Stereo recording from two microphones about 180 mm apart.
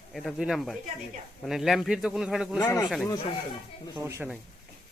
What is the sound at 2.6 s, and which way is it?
Speech, 15° left (ahead or behind).